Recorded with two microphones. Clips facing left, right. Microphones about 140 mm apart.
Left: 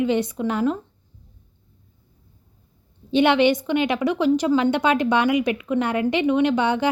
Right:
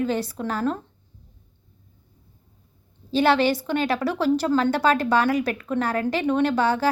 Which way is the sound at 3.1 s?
20° left (ahead or behind).